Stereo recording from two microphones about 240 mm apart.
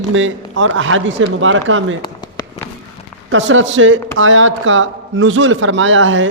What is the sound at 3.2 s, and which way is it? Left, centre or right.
A man's voice, right.